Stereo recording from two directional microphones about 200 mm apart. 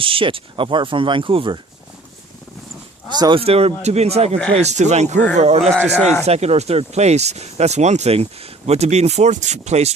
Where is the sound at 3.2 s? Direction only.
25° right (ahead or behind).